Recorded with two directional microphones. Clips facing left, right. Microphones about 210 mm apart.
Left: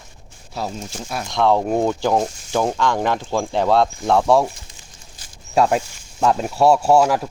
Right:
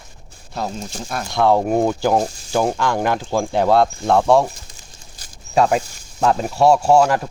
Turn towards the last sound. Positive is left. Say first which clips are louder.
# right 1 dB
turn(degrees=5)  # may be behind; listen again after turning